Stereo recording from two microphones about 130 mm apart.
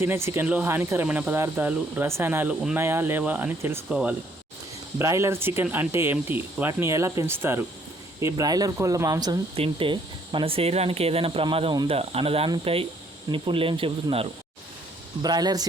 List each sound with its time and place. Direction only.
0.0 s speech: 20° right (ahead or behind)
4.9 s speech: 20° right (ahead or behind)
9.6 s speech: 40° right (ahead or behind)
15.2 s speech: 30° right (ahead or behind)